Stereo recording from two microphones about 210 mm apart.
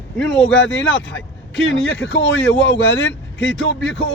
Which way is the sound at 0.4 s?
60° left (ahead or behind).